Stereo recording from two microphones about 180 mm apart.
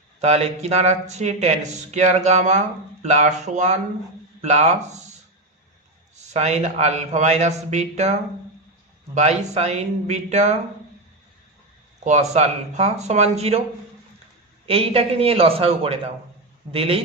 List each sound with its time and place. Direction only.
0.2 s speech: 35° right (ahead or behind)
6.1 s speech: 40° right (ahead or behind)
9.1 s speech: 40° right (ahead or behind)
12.0 s speech: 40° right (ahead or behind)
14.7 s speech: 30° right (ahead or behind)